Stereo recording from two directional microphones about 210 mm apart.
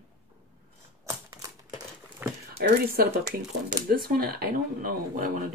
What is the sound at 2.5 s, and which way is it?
Speech, 45° right (ahead or behind).